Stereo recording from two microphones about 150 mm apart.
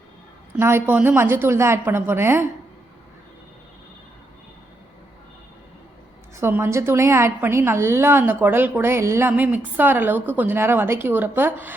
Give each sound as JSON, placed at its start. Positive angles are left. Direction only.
{"t": 0.5, "sound": "a woman's voice", "side_deg": -15}
{"t": 6.3, "sound": "a woman's voice", "side_deg": -15}